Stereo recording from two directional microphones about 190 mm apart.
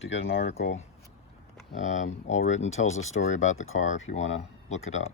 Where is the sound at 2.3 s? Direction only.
90° left.